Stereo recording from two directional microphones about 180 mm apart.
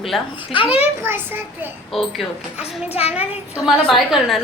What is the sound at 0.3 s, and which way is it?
Speech, 30° left (ahead or behind).